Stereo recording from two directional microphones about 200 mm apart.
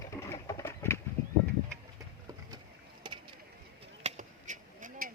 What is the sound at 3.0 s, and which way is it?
Bird, 25° right (ahead or behind).